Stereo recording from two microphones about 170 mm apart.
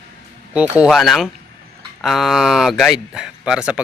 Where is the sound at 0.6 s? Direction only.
5° right (ahead or behind).